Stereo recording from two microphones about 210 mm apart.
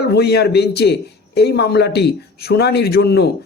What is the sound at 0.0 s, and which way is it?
A man's voice, 50° left (ahead or behind).